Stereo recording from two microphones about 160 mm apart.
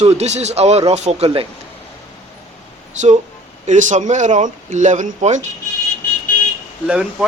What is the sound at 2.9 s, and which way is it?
Speech, 45° right (ahead or behind).